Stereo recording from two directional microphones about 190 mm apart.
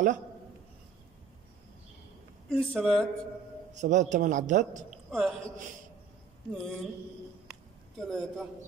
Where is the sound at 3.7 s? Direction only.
40° right (ahead or behind).